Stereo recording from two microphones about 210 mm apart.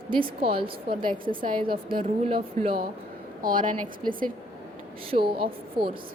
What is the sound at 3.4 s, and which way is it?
Speech, 40° right (ahead or behind).